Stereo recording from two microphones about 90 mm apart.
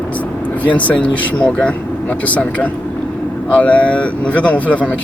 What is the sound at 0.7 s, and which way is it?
Speech, 15° left (ahead or behind).